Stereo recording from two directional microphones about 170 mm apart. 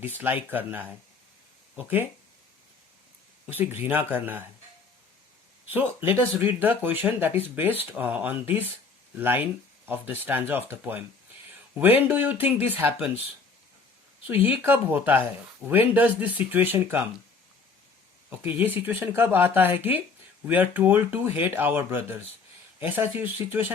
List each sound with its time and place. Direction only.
0.5 s speech: 10° right (ahead or behind)
3.4 s speech: 10° right (ahead or behind)
5.6 s speech: 10° right (ahead or behind)
14.4 s speech: 10° right (ahead or behind)
18.3 s speech: 10° right (ahead or behind)